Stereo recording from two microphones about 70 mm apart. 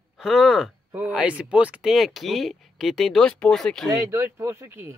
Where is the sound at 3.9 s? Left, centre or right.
Right.